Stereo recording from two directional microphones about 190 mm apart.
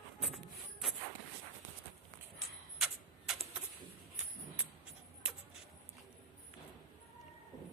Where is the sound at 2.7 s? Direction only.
Centre (ahead or behind).